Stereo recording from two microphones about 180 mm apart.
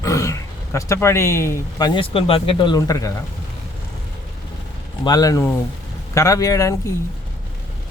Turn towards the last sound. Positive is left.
turn(degrees=20)  # may be behind; listen again after turning